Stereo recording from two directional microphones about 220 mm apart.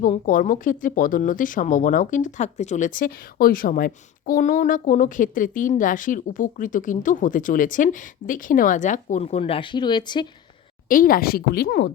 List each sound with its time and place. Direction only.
0.0 s speech: 40° left (ahead or behind); by 10.2 s 20° left (ahead or behind)
10.8 s speech: 40° left (ahead or behind)